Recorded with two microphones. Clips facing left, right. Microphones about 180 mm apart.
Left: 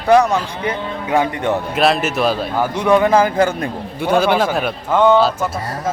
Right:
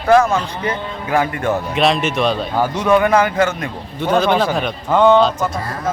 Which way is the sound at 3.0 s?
30° left (ahead or behind).